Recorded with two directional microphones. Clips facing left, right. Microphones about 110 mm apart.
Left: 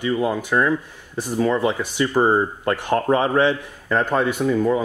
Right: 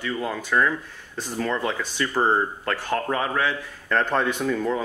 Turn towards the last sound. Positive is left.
turn(degrees=10)  # may be behind; listen again after turning